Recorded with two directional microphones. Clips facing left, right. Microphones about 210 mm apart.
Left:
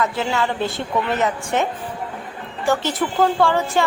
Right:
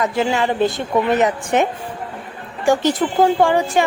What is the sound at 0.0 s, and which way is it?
A woman's voice, 15° right (ahead or behind).